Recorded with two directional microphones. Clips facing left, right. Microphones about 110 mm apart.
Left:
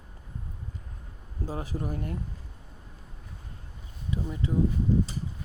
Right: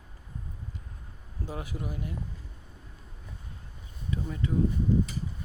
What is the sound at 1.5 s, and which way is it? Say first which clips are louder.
Speech: left 3 dB; 40° left (ahead or behind).